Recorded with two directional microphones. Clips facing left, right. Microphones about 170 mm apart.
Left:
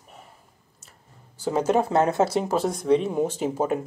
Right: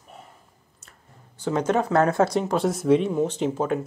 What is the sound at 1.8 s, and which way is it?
Speech, 25° left (ahead or behind).